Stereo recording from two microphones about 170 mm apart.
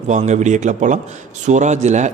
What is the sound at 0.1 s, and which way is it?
Speech, 45° right (ahead or behind).